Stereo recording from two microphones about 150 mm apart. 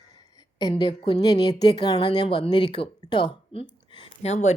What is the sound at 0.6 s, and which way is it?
A woman's voice, 30° left (ahead or behind).